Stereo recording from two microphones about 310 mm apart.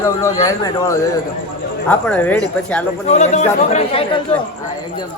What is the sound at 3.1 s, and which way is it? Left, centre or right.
Speech, left.